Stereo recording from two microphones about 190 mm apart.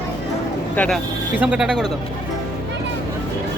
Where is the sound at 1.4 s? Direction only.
5° right (ahead or behind).